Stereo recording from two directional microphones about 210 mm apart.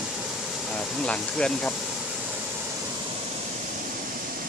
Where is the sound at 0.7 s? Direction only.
5° left (ahead or behind).